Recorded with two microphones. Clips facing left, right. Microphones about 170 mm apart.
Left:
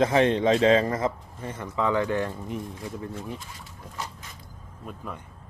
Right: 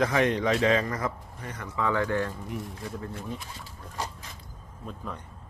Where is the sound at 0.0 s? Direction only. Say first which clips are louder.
Left 4 dB; 25° left (ahead or behind).